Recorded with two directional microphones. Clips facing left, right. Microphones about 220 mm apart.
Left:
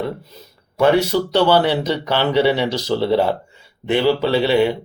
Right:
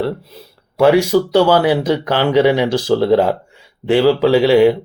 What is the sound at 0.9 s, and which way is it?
Speech, 10° right (ahead or behind).